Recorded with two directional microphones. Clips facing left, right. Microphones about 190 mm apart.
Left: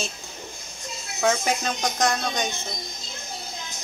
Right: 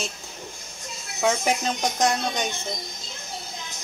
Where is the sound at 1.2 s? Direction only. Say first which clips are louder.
Even; 10° right (ahead or behind).